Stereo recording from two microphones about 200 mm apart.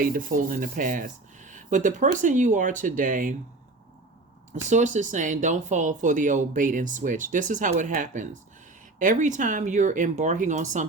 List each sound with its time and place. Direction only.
0.0 s speech: 45° right (ahead or behind)
4.5 s speech: 35° right (ahead or behind)